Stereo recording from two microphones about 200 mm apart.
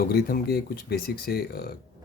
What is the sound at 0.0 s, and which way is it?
A man's voice, 50° left (ahead or behind).